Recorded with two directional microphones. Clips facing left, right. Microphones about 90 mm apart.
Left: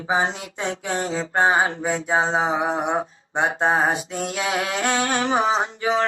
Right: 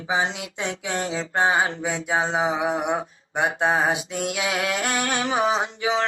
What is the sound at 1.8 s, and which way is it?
Mantra, 20° left (ahead or behind).